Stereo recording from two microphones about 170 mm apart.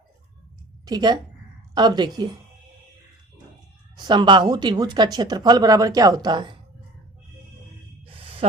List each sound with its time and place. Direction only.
0.9 s a woman's voice: 25° right (ahead or behind)
3.9 s a woman's voice: 25° right (ahead or behind)
8.0 s a sound: 35° right (ahead or behind)